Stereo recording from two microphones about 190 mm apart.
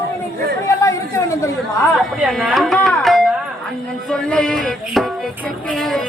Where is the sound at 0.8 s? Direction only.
15° left (ahead or behind).